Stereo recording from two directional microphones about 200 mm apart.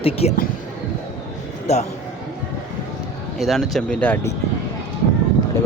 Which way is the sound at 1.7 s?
35° left (ahead or behind).